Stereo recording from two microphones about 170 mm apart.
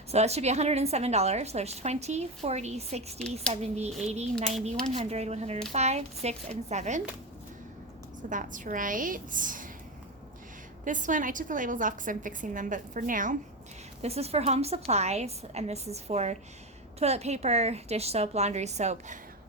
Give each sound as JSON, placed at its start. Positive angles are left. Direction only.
{"t": 0.1, "sound": "a woman's voice", "side_deg": -40}
{"t": 8.3, "sound": "a woman's voice", "side_deg": -50}
{"t": 10.8, "sound": "a woman's voice", "side_deg": -50}
{"t": 14.0, "sound": "a woman's voice", "side_deg": -35}